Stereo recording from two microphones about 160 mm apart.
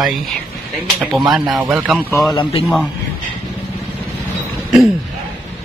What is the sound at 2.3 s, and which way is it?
Speech, 35° left (ahead or behind).